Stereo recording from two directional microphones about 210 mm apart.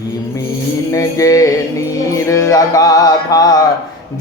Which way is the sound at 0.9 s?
15° left (ahead or behind).